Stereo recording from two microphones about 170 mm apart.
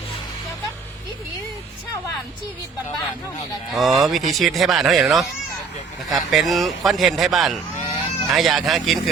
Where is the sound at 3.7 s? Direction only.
Centre (ahead or behind).